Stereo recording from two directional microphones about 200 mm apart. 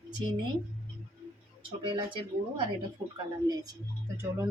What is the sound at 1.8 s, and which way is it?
Speech, 25° right (ahead or behind).